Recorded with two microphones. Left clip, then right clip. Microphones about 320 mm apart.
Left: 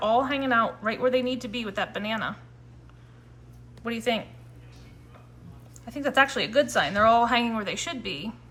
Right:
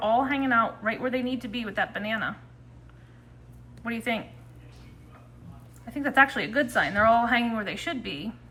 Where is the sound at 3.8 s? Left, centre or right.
Centre.